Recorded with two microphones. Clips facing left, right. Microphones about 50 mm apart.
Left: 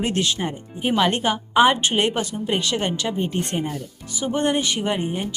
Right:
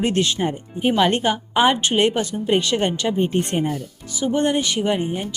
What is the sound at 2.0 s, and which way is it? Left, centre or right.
Speech, centre.